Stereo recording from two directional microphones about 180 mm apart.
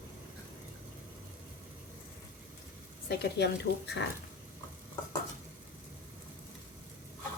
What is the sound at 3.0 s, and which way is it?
Speech, 70° left (ahead or behind).